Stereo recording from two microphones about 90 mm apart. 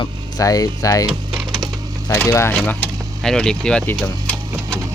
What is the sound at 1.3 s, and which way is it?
Sewing machine, 5° left (ahead or behind).